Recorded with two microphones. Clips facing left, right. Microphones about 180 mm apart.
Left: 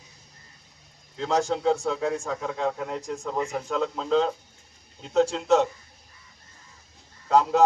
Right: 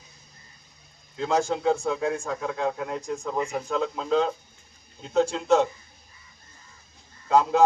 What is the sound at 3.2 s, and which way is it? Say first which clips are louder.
A man's voice: even; 10° right (ahead or behind).